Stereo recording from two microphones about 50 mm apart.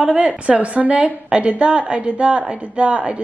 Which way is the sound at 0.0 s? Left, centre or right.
Centre.